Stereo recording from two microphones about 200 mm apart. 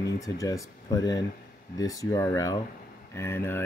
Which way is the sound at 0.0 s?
15° left (ahead or behind).